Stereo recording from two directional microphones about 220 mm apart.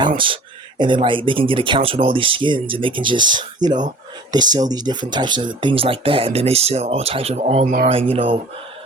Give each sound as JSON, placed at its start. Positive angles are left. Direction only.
{"t": 0.8, "sound": "speech", "side_deg": -20}